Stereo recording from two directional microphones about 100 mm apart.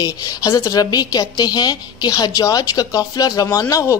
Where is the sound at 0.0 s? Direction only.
35° left (ahead or behind).